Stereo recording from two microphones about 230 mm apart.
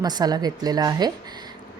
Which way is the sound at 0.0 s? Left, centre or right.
Centre.